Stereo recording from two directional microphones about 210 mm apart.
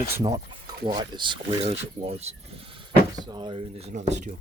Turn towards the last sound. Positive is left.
turn(degrees=-35)  # may be behind; listen again after turning